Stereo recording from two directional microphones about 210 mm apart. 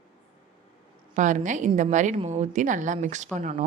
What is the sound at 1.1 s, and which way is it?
A woman's voice, 35° right (ahead or behind).